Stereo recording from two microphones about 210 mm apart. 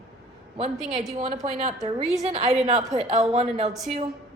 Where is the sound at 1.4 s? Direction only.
30° right (ahead or behind).